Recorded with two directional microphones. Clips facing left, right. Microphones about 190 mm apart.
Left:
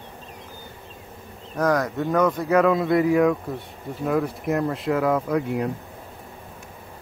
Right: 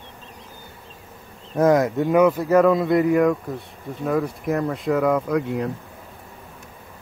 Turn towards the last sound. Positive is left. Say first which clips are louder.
# right 1 dB
turn(degrees=5)  # may be behind; listen again after turning